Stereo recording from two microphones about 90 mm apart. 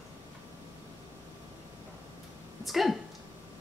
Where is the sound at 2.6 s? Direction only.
Centre (ahead or behind).